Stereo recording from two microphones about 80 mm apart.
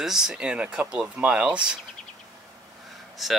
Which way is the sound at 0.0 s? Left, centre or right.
Centre.